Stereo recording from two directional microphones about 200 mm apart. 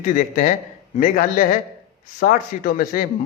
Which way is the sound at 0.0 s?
40° left (ahead or behind).